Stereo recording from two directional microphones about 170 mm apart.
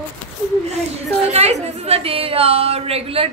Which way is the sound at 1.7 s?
35° right (ahead or behind).